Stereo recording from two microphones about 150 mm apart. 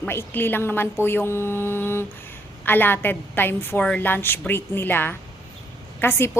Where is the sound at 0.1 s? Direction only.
15° left (ahead or behind).